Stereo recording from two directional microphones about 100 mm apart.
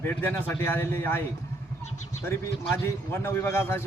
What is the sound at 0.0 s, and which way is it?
A man's voice, 20° left (ahead or behind).